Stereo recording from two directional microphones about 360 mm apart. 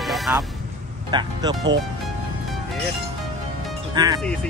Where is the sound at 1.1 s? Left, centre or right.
Centre.